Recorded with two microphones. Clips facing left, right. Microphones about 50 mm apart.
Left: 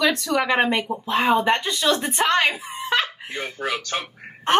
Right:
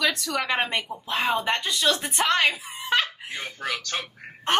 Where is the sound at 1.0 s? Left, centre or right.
Left.